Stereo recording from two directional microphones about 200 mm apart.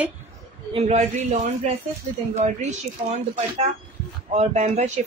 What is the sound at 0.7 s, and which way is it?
Speech, 35° right (ahead or behind).